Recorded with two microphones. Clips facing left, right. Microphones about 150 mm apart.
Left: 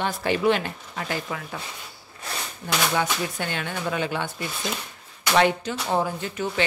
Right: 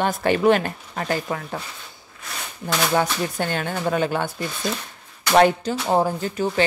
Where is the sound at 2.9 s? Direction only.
40° right (ahead or behind).